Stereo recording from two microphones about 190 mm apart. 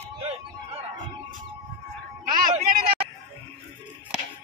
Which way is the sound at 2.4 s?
25° right (ahead or behind).